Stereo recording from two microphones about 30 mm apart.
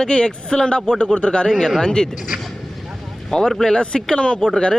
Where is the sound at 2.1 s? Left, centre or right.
Centre.